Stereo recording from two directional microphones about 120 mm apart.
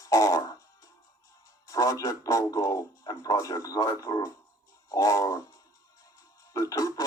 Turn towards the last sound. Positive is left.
turn(degrees=30)  # may be behind; listen again after turning